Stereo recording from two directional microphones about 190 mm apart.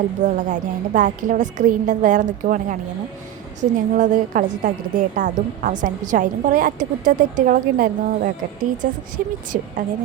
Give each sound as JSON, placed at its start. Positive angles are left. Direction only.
{"t": 0.2, "sound": "a woman's voice", "side_deg": -40}